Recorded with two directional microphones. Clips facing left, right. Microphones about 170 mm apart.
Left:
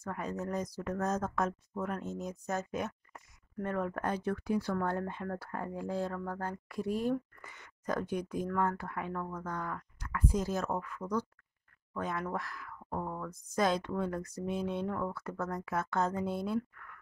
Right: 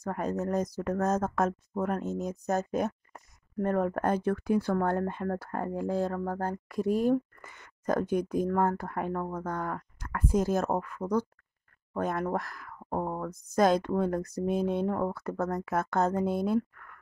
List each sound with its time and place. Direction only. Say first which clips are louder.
0.0 s speech: right 6 dB; 45° right (ahead or behind)